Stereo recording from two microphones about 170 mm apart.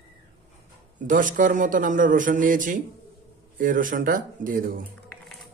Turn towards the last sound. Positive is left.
turn(degrees=-55)  # may be behind; listen again after turning